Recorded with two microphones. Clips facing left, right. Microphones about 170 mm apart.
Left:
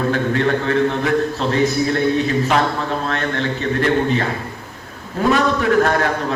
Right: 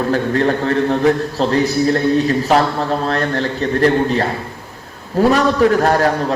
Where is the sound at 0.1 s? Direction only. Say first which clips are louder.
Right 2 dB; 35° right (ahead or behind).